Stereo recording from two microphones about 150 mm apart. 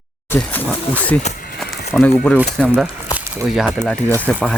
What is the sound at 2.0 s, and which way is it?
Speech, 10° left (ahead or behind).